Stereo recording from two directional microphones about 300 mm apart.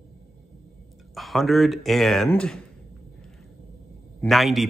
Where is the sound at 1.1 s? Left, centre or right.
Centre.